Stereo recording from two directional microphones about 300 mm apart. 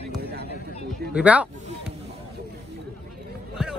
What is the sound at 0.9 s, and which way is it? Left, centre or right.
Speech, centre.